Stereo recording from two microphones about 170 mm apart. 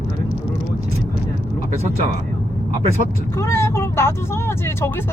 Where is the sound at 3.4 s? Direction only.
15° left (ahead or behind).